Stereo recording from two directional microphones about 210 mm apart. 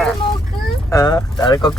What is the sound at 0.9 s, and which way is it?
Speech, 15° left (ahead or behind).